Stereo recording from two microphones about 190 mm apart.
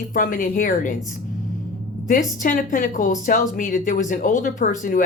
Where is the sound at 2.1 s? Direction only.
45° left (ahead or behind).